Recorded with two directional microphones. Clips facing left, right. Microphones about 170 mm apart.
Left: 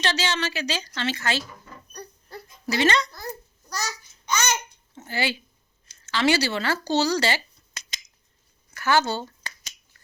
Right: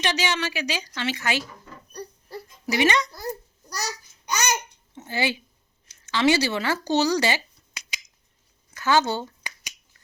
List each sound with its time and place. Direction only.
0.0 s a woman's voice: 15° right (ahead or behind)
2.6 s a woman's voice: 15° right (ahead or behind)
4.3 s babbling: 40° right (ahead or behind)
4.9 s speech: 20° right (ahead or behind)
5.9 s a sound: 20° right (ahead or behind)
8.7 s finger snapping: 20° right (ahead or behind)